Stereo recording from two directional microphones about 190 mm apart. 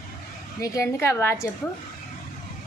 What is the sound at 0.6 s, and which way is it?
Speech, 15° left (ahead or behind).